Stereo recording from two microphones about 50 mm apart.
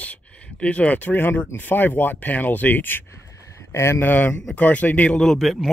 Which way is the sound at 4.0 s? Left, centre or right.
Left.